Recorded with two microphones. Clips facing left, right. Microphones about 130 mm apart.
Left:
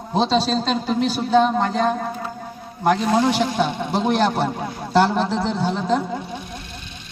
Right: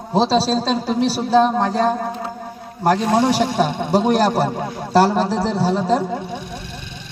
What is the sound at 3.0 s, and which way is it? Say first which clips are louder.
Speech: right 2 dB; 25° right (ahead or behind).